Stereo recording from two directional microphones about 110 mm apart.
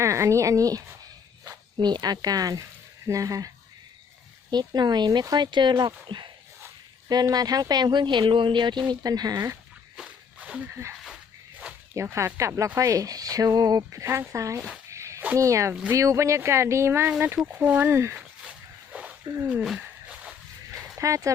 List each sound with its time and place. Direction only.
0.0 s speech: 25° right (ahead or behind)
4.5 s speech: 40° right (ahead or behind)
10.0 s a sound: 10° right (ahead or behind)
11.9 s speech: 25° right (ahead or behind)
14.8 s a sound: 30° right (ahead or behind)
15.4 s speech: 30° right (ahead or behind)
18.2 s dog: 10° right (ahead or behind)
19.8 s a sound: 10° right (ahead or behind)
21.0 s speech: 30° right (ahead or behind)